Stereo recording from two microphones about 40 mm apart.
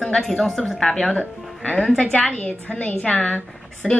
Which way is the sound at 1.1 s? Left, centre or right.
Left.